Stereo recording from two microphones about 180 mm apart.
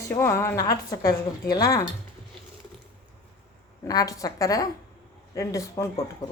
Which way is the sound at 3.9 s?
20° left (ahead or behind).